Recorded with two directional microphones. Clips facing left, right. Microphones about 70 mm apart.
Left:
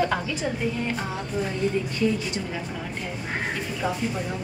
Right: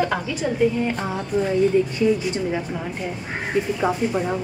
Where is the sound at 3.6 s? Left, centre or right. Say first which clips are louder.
Right 10 dB; right.